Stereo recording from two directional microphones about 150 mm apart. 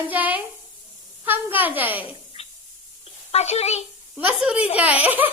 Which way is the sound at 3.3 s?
45° left (ahead or behind).